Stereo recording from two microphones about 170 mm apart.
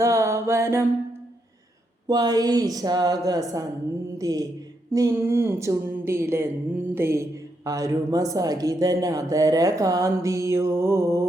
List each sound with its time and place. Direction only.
0.0 s a woman's voice: 15° right (ahead or behind)
2.0 s a woman's voice: 25° right (ahead or behind)